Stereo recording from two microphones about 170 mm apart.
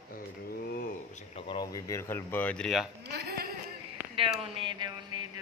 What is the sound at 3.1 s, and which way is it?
Speech, 65° right (ahead or behind).